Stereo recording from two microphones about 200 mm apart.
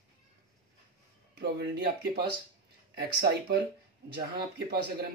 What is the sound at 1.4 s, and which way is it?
Speech, 55° right (ahead or behind).